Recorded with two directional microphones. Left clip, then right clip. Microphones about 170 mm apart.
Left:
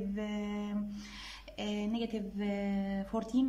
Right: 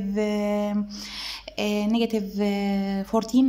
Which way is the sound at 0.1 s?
30° right (ahead or behind).